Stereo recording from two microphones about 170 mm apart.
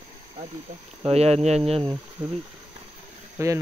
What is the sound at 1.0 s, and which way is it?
Speech, 40° right (ahead or behind).